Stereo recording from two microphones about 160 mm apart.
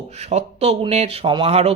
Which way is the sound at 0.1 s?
40° right (ahead or behind).